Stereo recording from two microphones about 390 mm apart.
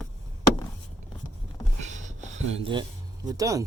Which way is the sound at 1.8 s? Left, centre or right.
Centre.